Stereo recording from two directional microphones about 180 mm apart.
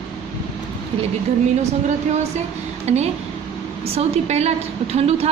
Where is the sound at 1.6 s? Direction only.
40° right (ahead or behind).